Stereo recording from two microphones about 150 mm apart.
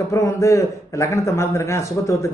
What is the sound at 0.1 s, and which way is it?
A man's voice, 20° left (ahead or behind).